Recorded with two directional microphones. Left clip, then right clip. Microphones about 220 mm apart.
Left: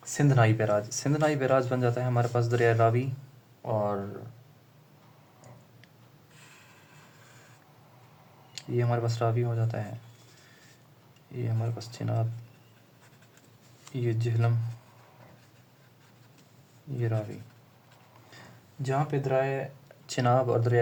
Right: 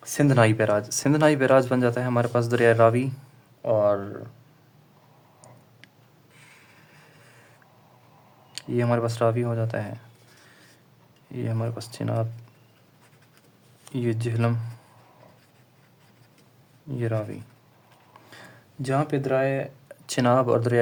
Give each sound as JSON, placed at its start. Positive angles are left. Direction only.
{"t": 0.1, "sound": "speech", "side_deg": -40}
{"t": 3.6, "sound": "speech", "side_deg": -45}
{"t": 8.5, "sound": "speech", "side_deg": -30}
{"t": 11.3, "sound": "speech", "side_deg": -35}
{"t": 13.9, "sound": "speech", "side_deg": -30}
{"t": 17.0, "sound": "speech", "side_deg": -35}
{"t": 18.8, "sound": "speech", "side_deg": -45}
{"t": 20.1, "sound": "speech", "side_deg": -35}